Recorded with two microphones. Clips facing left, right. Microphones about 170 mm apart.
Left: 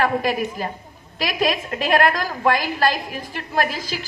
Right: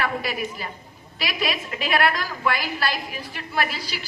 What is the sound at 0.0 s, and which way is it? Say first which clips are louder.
A woman's voice: left 6 dB; 45° left (ahead or behind).